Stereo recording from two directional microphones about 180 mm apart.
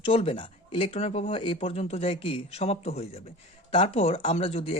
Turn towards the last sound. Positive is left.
turn(degrees=30)  # may be behind; listen again after turning